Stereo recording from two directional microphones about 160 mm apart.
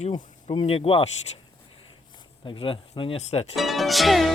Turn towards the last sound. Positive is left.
turn(degrees=0)  # may be behind; listen again after turning